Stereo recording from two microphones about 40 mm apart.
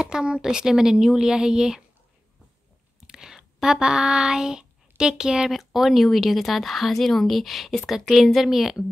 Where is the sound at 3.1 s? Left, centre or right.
Centre.